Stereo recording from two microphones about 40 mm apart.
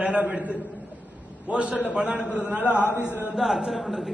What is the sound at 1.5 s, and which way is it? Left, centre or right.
Speech, right.